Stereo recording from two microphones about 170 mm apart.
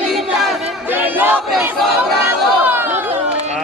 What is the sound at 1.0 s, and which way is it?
Choir, 10° right (ahead or behind).